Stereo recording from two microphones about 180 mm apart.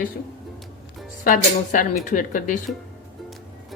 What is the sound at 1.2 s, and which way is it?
Speech, 45° left (ahead or behind).